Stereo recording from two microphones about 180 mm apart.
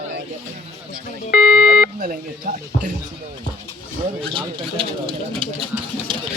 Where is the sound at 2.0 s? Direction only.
45° right (ahead or behind).